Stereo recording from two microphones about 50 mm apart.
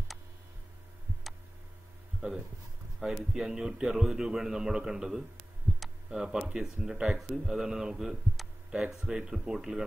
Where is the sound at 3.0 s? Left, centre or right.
Centre.